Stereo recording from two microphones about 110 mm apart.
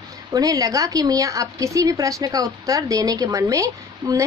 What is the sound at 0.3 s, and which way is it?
A woman's voice, 30° right (ahead or behind).